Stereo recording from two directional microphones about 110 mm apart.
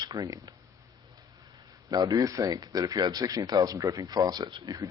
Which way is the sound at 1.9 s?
35° right (ahead or behind).